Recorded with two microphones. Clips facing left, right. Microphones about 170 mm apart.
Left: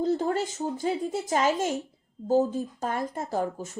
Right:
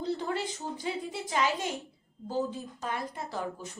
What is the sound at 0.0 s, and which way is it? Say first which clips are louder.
A woman's voice: left 6 dB; 45° left (ahead or behind).